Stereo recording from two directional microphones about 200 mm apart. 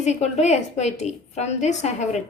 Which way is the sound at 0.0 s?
35° left (ahead or behind).